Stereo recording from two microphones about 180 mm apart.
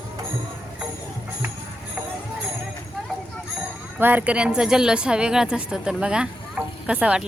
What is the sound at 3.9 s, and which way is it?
A woman's voice, 10° right (ahead or behind).